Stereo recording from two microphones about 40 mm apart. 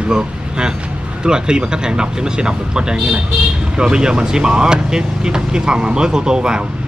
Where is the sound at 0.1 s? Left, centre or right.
Right.